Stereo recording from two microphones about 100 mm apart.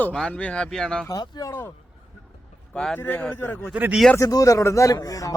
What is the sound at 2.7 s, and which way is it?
Speech, 5° left (ahead or behind).